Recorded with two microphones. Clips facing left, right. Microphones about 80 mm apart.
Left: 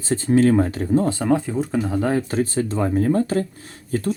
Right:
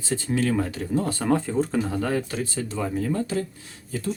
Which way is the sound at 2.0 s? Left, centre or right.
Left.